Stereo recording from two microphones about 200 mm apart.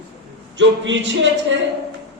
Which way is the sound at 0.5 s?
65° right (ahead or behind).